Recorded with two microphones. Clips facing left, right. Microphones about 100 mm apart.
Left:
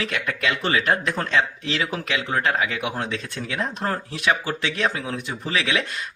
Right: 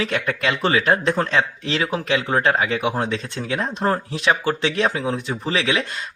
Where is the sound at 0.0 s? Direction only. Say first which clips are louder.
Right 3 dB; 35° right (ahead or behind).